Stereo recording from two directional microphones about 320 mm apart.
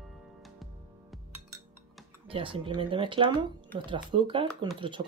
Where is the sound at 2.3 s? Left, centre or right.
Centre.